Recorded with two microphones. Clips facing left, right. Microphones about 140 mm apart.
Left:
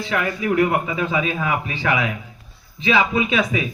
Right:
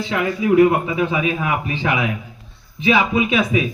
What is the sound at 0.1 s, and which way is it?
A man's voice, 20° right (ahead or behind).